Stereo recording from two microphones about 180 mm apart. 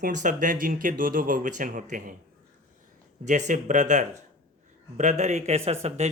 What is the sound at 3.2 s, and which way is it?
Speech, 40° right (ahead or behind).